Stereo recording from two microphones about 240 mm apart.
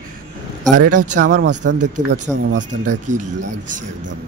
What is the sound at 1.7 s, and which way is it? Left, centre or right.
Speech, right.